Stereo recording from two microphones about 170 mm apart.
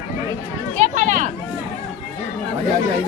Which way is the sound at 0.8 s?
50° right (ahead or behind).